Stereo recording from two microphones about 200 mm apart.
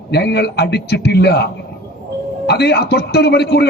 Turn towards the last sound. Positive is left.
turn(degrees=55)  # may be behind; listen again after turning